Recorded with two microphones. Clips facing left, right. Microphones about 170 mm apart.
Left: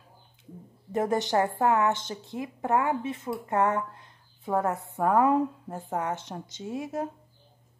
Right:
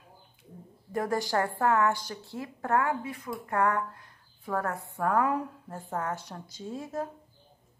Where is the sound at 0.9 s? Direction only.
20° left (ahead or behind).